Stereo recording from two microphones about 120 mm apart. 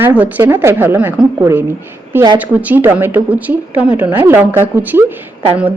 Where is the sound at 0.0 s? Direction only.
15° right (ahead or behind).